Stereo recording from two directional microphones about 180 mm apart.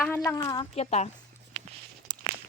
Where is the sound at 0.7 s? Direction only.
35° left (ahead or behind).